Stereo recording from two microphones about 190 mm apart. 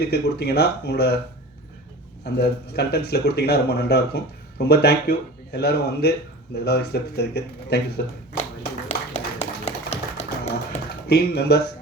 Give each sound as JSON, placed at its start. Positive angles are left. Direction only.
{"t": 0.0, "sound": "speech", "side_deg": 60}
{"t": 2.4, "sound": "speech", "side_deg": 60}
{"t": 8.9, "sound": "a sound", "side_deg": 35}
{"t": 11.1, "sound": "speech", "side_deg": 60}